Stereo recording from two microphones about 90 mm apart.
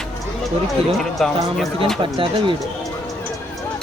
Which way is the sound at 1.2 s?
Centre (ahead or behind).